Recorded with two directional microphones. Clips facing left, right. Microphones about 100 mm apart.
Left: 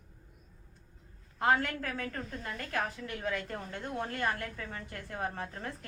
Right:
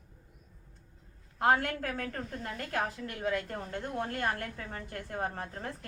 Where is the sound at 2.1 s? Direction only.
30° right (ahead or behind).